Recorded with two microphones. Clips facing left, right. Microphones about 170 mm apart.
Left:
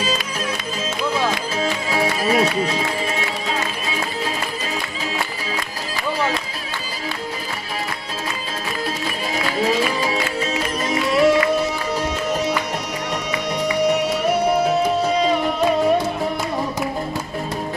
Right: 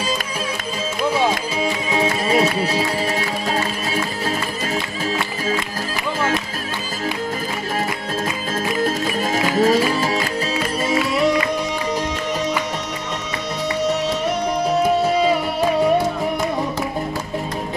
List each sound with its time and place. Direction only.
1.1 s music: 15° right (ahead or behind)
8.8 s music: 45° right (ahead or behind)
11.1 s music: centre (ahead or behind)
13.7 s music: 10° left (ahead or behind)